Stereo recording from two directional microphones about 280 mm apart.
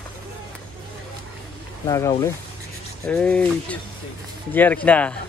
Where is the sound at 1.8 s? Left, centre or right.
Centre.